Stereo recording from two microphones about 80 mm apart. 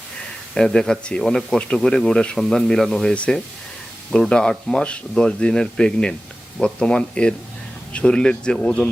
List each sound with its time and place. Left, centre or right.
0.5 s speech: centre